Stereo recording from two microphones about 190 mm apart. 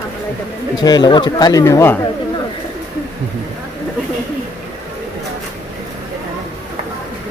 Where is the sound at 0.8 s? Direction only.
20° left (ahead or behind).